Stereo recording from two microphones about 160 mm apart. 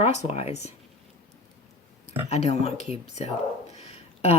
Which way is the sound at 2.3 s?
45° left (ahead or behind).